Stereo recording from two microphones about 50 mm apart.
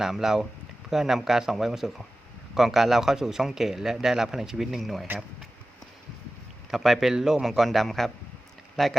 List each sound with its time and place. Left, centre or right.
0.0 s speech: centre
6.7 s a man's voice: centre